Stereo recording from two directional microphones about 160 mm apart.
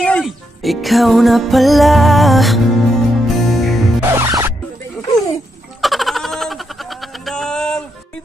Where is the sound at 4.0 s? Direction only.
15° right (ahead or behind).